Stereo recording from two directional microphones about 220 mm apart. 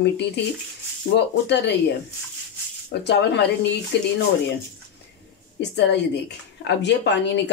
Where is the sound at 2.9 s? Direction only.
50° left (ahead or behind).